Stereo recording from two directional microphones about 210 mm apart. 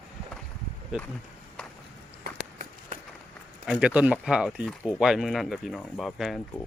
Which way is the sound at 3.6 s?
5° right (ahead or behind).